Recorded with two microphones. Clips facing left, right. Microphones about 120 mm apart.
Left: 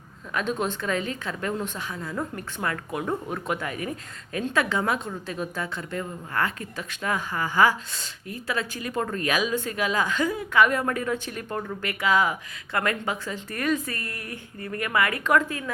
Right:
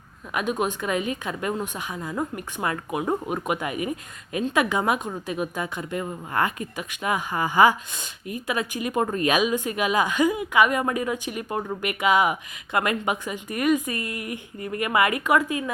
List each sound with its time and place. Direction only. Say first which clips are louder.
0.3 s a woman's voice: right 2 dB; 10° right (ahead or behind)